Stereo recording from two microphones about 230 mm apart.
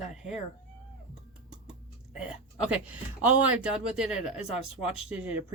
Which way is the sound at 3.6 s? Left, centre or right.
Centre.